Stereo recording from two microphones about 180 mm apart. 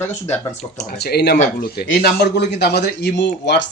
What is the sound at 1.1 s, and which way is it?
Speech, 65° left (ahead or behind).